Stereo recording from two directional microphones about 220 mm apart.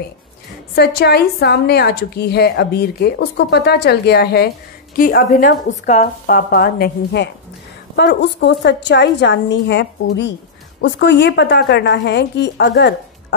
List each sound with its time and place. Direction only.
0.7 s a woman's voice: 50° left (ahead or behind)